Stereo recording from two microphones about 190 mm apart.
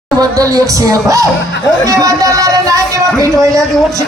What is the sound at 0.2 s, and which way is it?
Speech, 20° right (ahead or behind).